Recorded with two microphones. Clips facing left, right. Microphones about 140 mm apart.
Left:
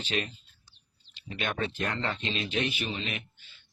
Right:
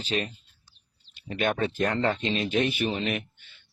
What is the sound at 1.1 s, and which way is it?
Speech, 50° right (ahead or behind).